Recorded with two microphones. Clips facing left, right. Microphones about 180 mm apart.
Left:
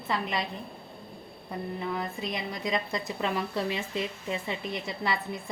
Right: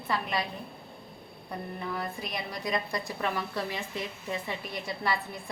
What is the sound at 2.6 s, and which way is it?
A woman's voice, 20° left (ahead or behind).